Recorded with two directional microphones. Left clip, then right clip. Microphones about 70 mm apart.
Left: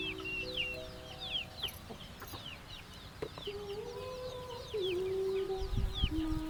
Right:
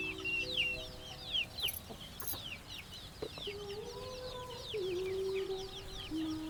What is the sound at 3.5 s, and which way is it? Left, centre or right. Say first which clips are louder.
Chicken: left 2 dB; right.